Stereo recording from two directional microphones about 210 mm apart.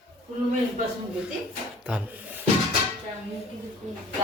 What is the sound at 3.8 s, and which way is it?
Speech, 35° right (ahead or behind).